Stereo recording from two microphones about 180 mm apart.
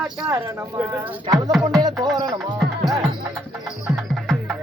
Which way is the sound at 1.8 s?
20° right (ahead or behind).